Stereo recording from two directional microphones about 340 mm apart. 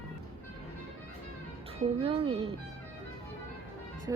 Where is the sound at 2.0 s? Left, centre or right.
Centre.